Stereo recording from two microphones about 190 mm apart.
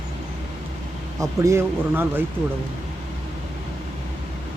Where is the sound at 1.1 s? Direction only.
15° right (ahead or behind).